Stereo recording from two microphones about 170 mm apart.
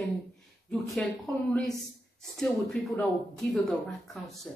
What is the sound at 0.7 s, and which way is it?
A woman's voice, 5° left (ahead or behind).